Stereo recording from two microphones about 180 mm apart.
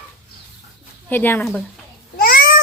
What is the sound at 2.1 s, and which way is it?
Babbling, 55° left (ahead or behind).